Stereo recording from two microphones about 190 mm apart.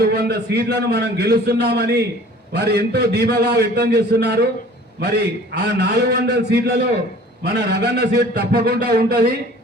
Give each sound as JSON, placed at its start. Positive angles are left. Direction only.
{"t": 0.0, "sound": "a man's voice", "side_deg": -60}
{"t": 5.5, "sound": "a man's voice", "side_deg": -60}